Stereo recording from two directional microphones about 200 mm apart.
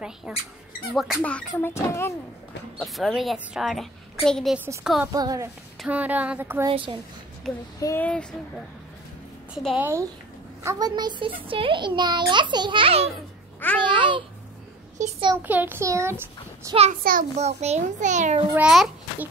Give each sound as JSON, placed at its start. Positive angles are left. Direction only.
{"t": 0.3, "sound": "a woman's voice", "side_deg": 0}
{"t": 1.5, "sound": "speech", "side_deg": 15}
{"t": 2.8, "sound": "a woman's voice", "side_deg": 0}
{"t": 5.1, "sound": "female singing", "side_deg": -20}
{"t": 5.8, "sound": "female singing", "side_deg": -5}
{"t": 7.8, "sound": "speech", "side_deg": 10}
{"t": 9.5, "sound": "a woman's voice", "side_deg": 0}
{"t": 10.6, "sound": "a child's voice", "side_deg": -15}
{"t": 13.1, "sound": "babbling", "side_deg": 10}
{"t": 13.7, "sound": "a child's voice", "side_deg": -25}
{"t": 15.4, "sound": "female singing", "side_deg": -10}
{"t": 17.0, "sound": "a child's voice", "side_deg": -45}
{"t": 18.5, "sound": "a woman's voice", "side_deg": -5}